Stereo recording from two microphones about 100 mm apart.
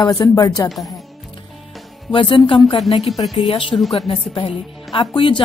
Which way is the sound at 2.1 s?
55° left (ahead or behind).